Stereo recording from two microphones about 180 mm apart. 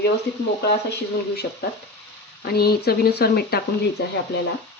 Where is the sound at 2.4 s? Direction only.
60° left (ahead or behind).